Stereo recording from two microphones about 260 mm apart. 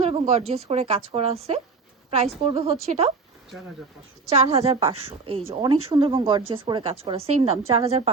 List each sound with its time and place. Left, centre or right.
0.0 s speech: right
4.3 s speech: right